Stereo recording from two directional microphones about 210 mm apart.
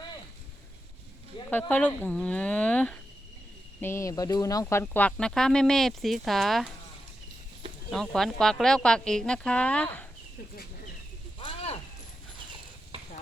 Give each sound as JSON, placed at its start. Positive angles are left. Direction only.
{"t": 1.5, "sound": "speech", "side_deg": 10}
{"t": 7.9, "sound": "speech", "side_deg": 0}
{"t": 11.3, "sound": "a sound", "side_deg": 25}